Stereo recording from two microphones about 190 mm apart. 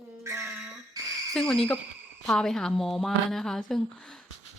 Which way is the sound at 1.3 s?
5° left (ahead or behind).